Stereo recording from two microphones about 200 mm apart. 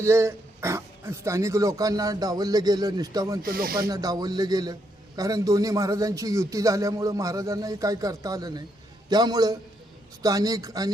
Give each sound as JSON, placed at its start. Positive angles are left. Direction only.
{"t": 0.0, "sound": "a man's voice", "side_deg": -15}
{"t": 3.4, "sound": "speech", "side_deg": -50}
{"t": 3.8, "sound": "a man's voice", "side_deg": -20}